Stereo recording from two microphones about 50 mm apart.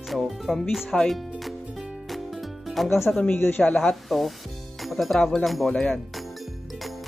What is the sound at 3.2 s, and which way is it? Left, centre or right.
Speech, left.